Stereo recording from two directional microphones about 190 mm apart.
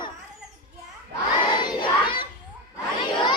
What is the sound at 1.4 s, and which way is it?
Crowd, 25° left (ahead or behind).